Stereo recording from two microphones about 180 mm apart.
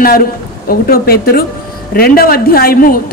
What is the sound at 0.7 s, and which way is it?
A woman's voice, 55° left (ahead or behind).